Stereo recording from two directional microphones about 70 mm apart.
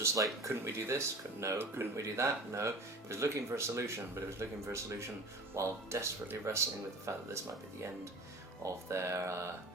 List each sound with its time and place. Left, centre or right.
0.0 s speech: right
8.6 s speech: right